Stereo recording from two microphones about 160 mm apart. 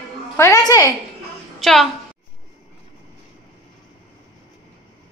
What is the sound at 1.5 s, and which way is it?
Speech, centre (ahead or behind).